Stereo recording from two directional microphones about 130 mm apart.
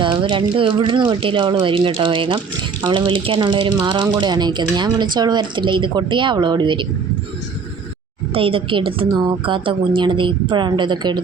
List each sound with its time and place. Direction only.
0.0 s a woman's voice: 40° right (ahead or behind)
8.3 s a woman's voice: 45° right (ahead or behind)